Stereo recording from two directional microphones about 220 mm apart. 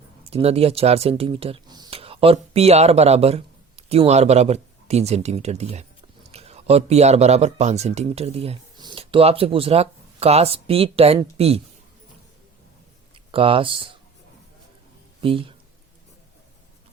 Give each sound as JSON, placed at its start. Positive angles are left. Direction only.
{"t": 0.3, "sound": "speech", "side_deg": -25}
{"t": 13.3, "sound": "speech", "side_deg": -25}
{"t": 15.2, "sound": "speech", "side_deg": -25}